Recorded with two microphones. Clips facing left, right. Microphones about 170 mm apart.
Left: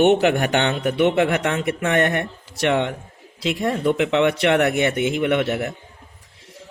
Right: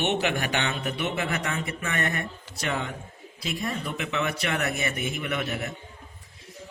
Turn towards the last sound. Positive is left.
turn(degrees=70)  # may be behind; listen again after turning